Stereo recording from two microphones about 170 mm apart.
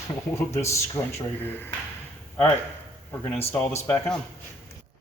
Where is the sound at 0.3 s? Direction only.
15° left (ahead or behind).